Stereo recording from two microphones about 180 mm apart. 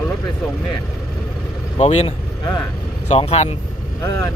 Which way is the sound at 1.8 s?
35° left (ahead or behind).